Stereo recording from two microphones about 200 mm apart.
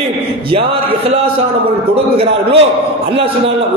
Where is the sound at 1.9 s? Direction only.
30° right (ahead or behind).